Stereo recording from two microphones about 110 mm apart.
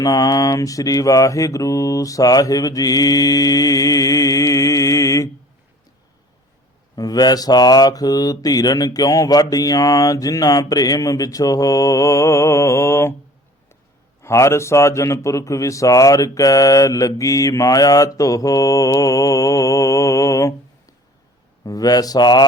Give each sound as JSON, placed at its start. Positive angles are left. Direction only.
{"t": 0.0, "sound": "mantra", "side_deg": 35}
{"t": 6.9, "sound": "mantra", "side_deg": 35}
{"t": 14.2, "sound": "a man's voice", "side_deg": 25}
{"t": 21.6, "sound": "mantra", "side_deg": 35}